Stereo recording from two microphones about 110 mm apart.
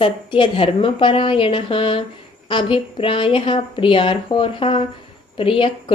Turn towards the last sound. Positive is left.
turn(degrees=55)  # may be behind; listen again after turning